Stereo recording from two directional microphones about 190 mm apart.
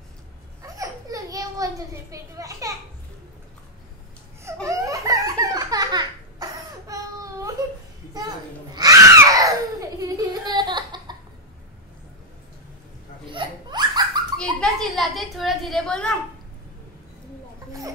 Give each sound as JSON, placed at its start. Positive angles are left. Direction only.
{"t": 0.6, "sound": "a sound", "side_deg": -20}
{"t": 4.6, "sound": "belly laugh", "side_deg": -15}
{"t": 8.7, "sound": "baby cry", "side_deg": -20}
{"t": 13.3, "sound": "laughter", "side_deg": -25}
{"t": 14.4, "sound": "a woman's voice", "side_deg": 5}